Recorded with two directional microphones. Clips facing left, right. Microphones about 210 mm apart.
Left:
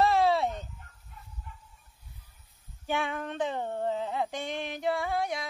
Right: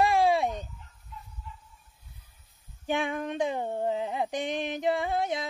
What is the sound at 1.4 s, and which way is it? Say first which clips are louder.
Hiss: right 2 dB; 55° left (ahead or behind).